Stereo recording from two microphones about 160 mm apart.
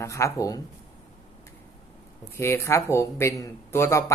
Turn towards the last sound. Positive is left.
turn(degrees=20)  # may be behind; listen again after turning